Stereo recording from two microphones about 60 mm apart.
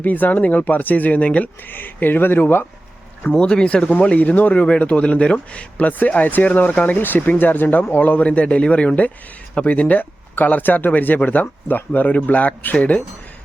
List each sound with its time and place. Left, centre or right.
0.0 s speech: left
3.3 s speech: centre; by 8.2 s left
8.2 s speech: left